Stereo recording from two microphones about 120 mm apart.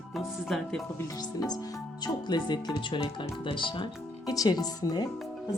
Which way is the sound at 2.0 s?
35° left (ahead or behind).